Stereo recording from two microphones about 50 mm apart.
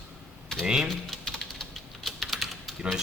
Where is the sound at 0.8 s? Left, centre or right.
Centre.